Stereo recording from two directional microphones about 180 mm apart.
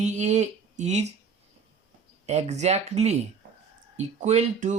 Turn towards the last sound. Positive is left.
turn(degrees=-40)  # may be behind; listen again after turning